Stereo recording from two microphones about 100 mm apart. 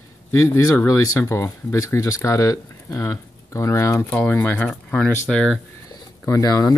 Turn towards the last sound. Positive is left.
turn(degrees=40)  # may be behind; listen again after turning